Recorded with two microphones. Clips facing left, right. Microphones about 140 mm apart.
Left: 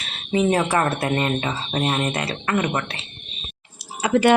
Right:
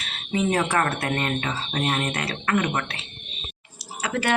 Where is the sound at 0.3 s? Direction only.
10° left (ahead or behind).